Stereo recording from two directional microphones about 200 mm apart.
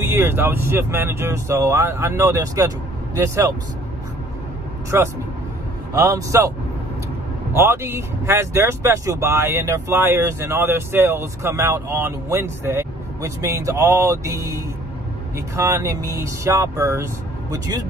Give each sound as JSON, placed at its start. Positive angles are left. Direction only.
{"t": 0.0, "sound": "speech", "side_deg": -10}
{"t": 4.9, "sound": "speech", "side_deg": -10}
{"t": 7.5, "sound": "speech", "side_deg": -10}